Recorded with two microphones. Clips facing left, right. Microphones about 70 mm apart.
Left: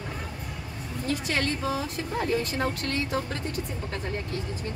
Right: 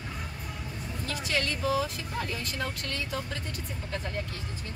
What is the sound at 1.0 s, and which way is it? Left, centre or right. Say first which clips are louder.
Speech: left 4 dB; left.